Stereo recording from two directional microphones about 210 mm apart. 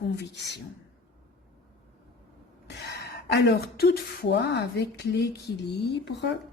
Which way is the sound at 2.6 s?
50° left (ahead or behind).